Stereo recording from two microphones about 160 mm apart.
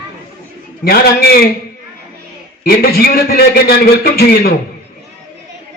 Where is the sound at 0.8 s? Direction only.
75° left (ahead or behind).